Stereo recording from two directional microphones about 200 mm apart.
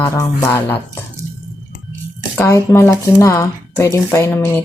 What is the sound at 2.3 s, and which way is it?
Speech, 15° left (ahead or behind).